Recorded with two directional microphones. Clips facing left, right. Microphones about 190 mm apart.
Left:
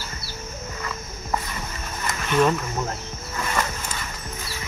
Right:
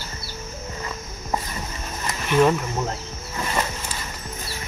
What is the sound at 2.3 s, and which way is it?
Speech, 10° right (ahead or behind).